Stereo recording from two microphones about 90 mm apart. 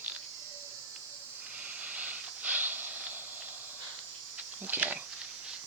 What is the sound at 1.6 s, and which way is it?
Hiss, 15° right (ahead or behind).